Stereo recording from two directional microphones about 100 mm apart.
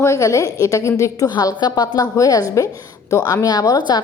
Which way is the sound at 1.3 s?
45° left (ahead or behind).